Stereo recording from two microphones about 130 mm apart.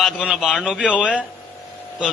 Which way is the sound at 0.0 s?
5° right (ahead or behind).